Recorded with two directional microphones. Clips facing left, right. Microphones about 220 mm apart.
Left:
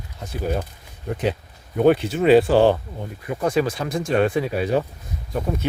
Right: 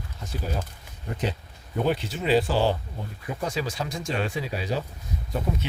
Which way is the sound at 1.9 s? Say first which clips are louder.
Left 10 dB; 55° left (ahead or behind).